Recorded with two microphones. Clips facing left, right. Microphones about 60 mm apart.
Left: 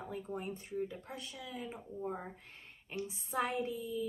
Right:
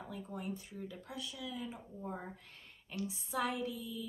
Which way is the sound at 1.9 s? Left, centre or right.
Centre.